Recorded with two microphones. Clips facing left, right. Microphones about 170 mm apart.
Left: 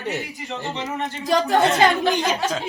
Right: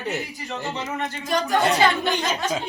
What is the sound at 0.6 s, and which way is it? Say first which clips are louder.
Speech: left 1 dB; 20° left (ahead or behind).